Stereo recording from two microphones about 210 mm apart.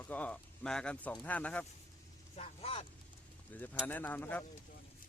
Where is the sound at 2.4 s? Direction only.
30° left (ahead or behind).